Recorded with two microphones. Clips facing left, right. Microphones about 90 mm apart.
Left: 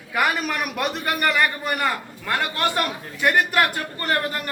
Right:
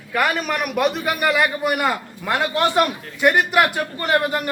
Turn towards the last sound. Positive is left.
turn(degrees=-15)  # may be behind; listen again after turning